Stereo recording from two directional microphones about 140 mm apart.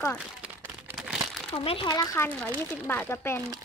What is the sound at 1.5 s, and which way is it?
Speech, 40° left (ahead or behind).